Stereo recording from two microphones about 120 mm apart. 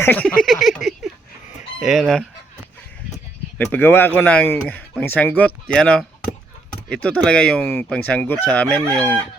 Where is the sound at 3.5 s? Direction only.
15° left (ahead or behind).